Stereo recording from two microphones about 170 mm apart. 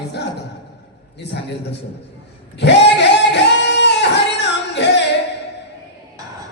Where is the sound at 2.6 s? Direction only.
90° left.